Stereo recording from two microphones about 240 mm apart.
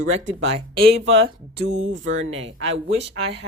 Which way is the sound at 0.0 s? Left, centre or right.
Right.